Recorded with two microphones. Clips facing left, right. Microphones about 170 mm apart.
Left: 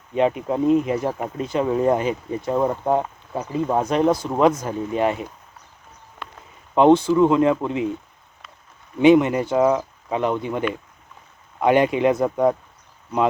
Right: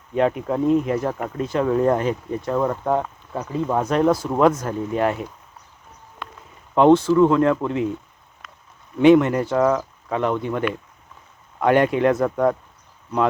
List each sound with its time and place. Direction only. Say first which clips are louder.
0.2 s speech: even; 10° left (ahead or behind)
3.4 s speech: left 1 dB; 5° left (ahead or behind)
3.9 s speech: right 2 dB; centre (ahead or behind)
6.7 s speech: right 1 dB; centre (ahead or behind)
9.0 s speech: right 1 dB; 5° left (ahead or behind)